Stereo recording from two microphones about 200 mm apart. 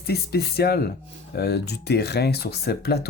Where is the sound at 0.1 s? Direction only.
55° left (ahead or behind).